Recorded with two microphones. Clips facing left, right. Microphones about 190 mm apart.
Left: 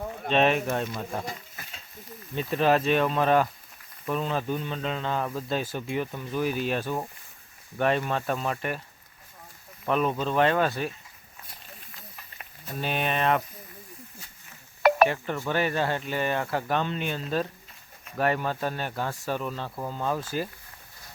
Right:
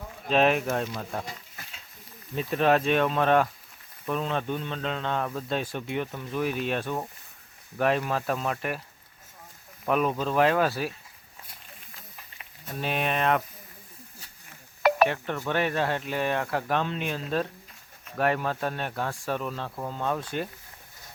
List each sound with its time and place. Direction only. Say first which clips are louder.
0.3 s a man's voice: even; centre (ahead or behind)
2.3 s a man's voice: even; centre (ahead or behind)
9.8 s a man's voice: even; 5° right (ahead or behind)
12.6 s a man's voice: even; centre (ahead or behind)
14.8 s telephone dialing: left 2 dB; 55° left (ahead or behind)
15.0 s a man's voice: left 1 dB; centre (ahead or behind)